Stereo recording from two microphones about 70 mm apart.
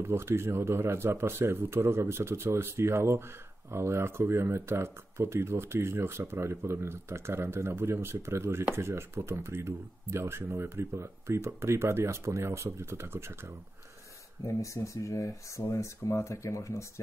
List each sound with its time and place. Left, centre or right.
0.0 s speech: right
14.4 s speech: left